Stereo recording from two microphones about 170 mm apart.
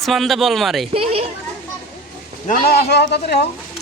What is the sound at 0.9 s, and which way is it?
Speech, 35° right (ahead or behind).